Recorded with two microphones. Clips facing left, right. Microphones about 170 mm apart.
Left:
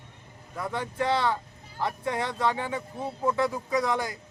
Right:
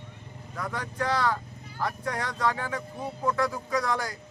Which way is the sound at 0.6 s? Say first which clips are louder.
Left 2 dB; 25° left (ahead or behind).